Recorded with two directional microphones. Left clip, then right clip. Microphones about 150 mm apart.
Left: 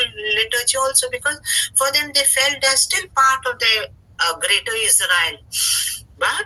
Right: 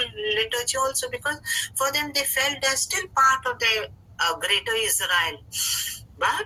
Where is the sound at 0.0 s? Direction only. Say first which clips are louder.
Left 5 dB; 25° left (ahead or behind).